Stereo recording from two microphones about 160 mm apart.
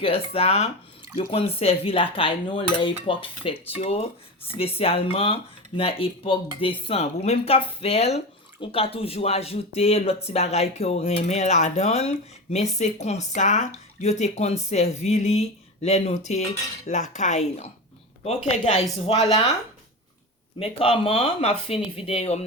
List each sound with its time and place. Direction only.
0.0 s cutlery: 40° left (ahead or behind)
10.2 s speech: 45° left (ahead or behind)
19.0 s cutlery: 40° left (ahead or behind)
20.6 s cutlery: 40° left (ahead or behind)